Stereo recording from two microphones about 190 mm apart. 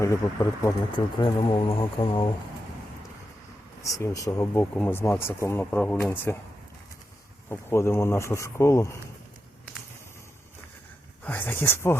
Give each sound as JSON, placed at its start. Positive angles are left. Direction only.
{"t": 0.0, "sound": "speech", "side_deg": 15}
{"t": 3.8, "sound": "speech", "side_deg": 15}
{"t": 7.5, "sound": "speech", "side_deg": 15}
{"t": 11.2, "sound": "speech", "side_deg": 10}